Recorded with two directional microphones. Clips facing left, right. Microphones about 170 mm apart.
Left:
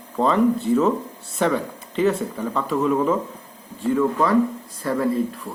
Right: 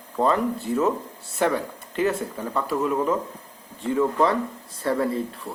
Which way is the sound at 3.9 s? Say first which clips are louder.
Left 2 dB; 25° right (ahead or behind).